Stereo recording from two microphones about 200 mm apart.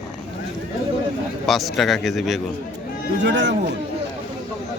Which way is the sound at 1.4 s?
Centre (ahead or behind).